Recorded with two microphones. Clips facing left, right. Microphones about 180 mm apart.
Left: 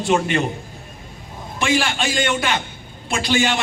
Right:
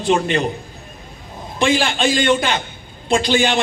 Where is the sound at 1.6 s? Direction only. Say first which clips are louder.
Right 4 dB; 30° right (ahead or behind).